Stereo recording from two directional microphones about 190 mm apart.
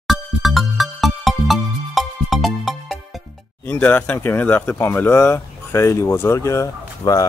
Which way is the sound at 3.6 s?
10° left (ahead or behind).